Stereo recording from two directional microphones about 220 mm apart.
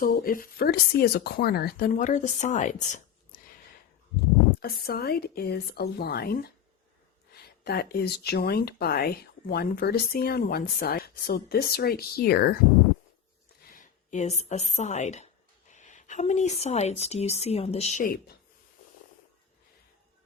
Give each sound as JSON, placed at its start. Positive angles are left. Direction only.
{"t": 0.0, "sound": "speech", "side_deg": 40}
{"t": 4.6, "sound": "speech", "side_deg": 45}
{"t": 13.7, "sound": "a woman's voice", "side_deg": 35}